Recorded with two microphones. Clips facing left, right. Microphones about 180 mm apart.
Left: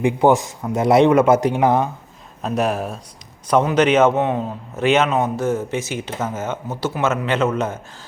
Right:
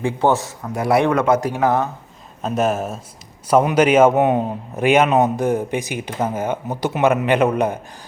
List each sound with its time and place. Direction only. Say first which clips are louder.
0.0 s a man's voice: left 3 dB; 15° left (ahead or behind)
2.4 s a man's voice: right 1 dB; centre (ahead or behind)